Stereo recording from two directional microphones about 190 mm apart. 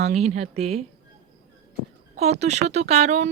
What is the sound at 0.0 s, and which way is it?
Speech, 35° right (ahead or behind).